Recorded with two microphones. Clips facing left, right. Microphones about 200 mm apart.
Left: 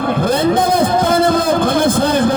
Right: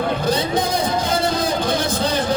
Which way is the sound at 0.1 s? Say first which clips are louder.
Left 6 dB; 55° left (ahead or behind).